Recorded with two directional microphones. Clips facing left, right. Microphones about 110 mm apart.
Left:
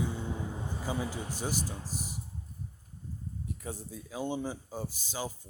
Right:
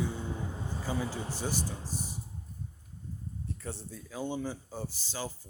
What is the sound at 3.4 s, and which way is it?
Speech, 10° left (ahead or behind).